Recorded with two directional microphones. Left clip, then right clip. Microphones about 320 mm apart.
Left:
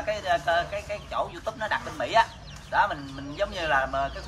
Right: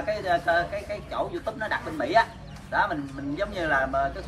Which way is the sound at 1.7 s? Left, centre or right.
Left.